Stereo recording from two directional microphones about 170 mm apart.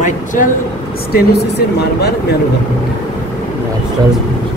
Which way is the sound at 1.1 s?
70° left (ahead or behind).